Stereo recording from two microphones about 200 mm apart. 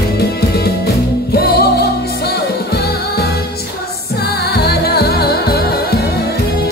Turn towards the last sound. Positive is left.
turn(degrees=50)  # may be behind; listen again after turning